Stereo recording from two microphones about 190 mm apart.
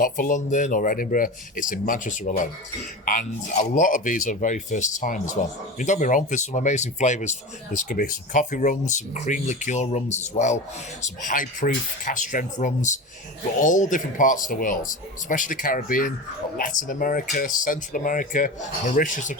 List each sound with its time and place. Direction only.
0.0 s a man's voice: 45° left (ahead or behind)